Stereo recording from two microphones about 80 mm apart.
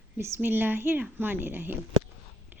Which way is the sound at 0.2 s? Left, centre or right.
Right.